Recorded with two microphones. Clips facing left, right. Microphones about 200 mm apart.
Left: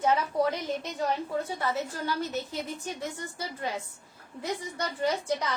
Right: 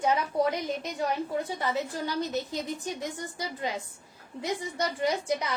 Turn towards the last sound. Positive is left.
turn(degrees=-10)  # may be behind; listen again after turning